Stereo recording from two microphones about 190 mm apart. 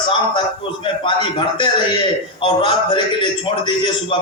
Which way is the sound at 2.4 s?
25° left (ahead or behind).